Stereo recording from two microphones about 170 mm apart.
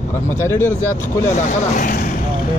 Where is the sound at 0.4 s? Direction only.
15° left (ahead or behind).